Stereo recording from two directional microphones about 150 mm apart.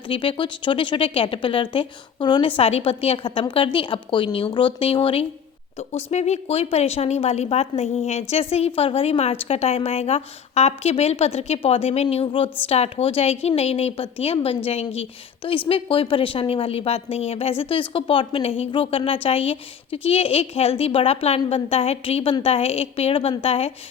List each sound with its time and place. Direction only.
0.1 s a woman's voice: 35° left (ahead or behind)
2.6 s a woman's voice: 40° left (ahead or behind)
5.9 s a woman's voice: 50° left (ahead or behind)